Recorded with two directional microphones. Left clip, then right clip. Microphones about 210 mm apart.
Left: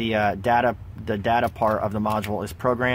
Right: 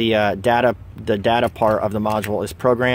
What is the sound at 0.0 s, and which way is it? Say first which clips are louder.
Speech: right 5 dB; 30° right (ahead or behind).